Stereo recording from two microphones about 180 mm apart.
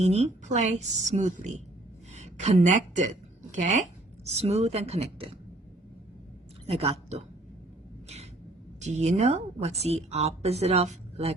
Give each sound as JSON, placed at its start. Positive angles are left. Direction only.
{"t": 0.0, "sound": "a woman's voice", "side_deg": -40}
{"t": 6.7, "sound": "a woman's voice", "side_deg": -35}
{"t": 8.8, "sound": "a woman's voice", "side_deg": -40}